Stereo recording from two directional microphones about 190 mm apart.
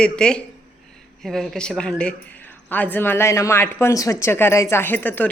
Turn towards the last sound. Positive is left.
turn(degrees=10)  # may be behind; listen again after turning